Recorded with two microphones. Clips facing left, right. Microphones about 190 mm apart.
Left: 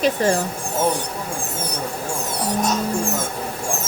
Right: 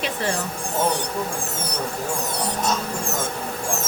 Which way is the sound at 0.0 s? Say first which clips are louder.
Left 7 dB; 40° left (ahead or behind).